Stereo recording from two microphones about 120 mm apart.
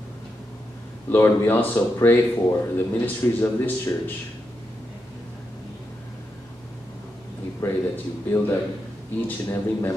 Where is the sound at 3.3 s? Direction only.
15° left (ahead or behind).